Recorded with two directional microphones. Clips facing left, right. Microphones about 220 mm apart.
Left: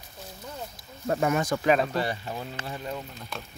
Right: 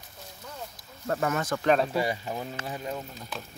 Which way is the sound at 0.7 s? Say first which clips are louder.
Left 2 dB; 15° left (ahead or behind).